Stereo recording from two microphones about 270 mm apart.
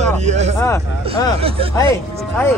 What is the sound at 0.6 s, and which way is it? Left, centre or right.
Speech, centre.